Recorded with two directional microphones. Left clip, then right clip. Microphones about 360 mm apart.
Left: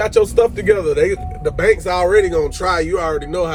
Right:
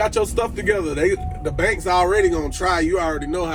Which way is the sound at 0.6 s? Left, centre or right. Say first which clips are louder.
Left 5 dB; centre.